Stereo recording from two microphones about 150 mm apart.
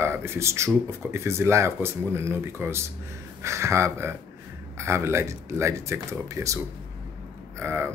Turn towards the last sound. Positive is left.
turn(degrees=-15)  # may be behind; listen again after turning